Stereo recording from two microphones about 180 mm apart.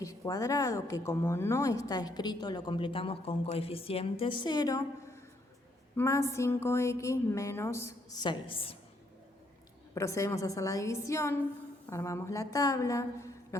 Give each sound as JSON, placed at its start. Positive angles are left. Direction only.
{"t": 0.0, "sound": "a woman's voice", "side_deg": 20}
{"t": 9.9, "sound": "a woman's voice", "side_deg": 15}